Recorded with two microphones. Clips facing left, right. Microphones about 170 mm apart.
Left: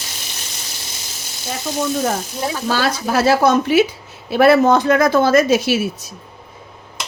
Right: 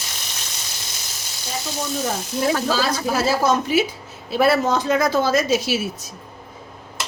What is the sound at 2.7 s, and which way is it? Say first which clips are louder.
A woman's voice: left 3 dB; 70° left (ahead or behind).